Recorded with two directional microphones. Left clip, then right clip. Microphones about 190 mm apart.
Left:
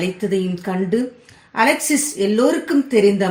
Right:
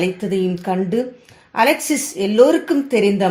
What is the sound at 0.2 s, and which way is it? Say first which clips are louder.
Speech: right 1 dB; 25° right (ahead or behind).